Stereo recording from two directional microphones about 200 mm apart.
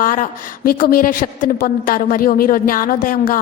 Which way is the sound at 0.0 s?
40° left (ahead or behind).